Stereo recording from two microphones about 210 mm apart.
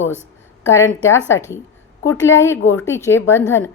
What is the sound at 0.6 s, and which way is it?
A woman's voice, 15° left (ahead or behind).